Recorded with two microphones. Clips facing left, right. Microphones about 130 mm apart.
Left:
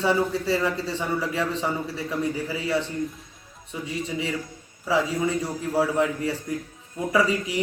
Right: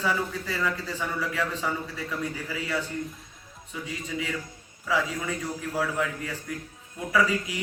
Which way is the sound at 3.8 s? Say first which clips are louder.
Left 4 dB; 25° left (ahead or behind).